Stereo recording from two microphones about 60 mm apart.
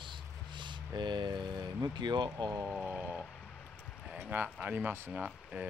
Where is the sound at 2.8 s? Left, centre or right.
Right.